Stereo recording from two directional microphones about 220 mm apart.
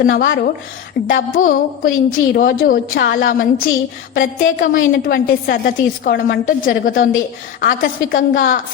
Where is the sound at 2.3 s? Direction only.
40° left (ahead or behind).